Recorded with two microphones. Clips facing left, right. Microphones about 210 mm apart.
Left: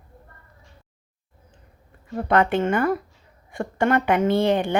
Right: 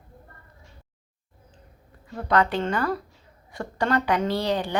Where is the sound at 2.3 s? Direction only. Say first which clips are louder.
Left 3 dB; 25° left (ahead or behind).